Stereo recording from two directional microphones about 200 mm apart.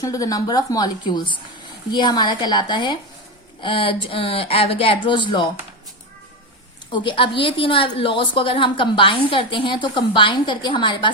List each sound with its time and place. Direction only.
0.0 s a woman's voice: 15° left (ahead or behind)
6.9 s a woman's voice: 25° left (ahead or behind)